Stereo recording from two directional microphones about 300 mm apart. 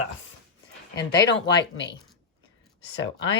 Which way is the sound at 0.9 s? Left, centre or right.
Centre.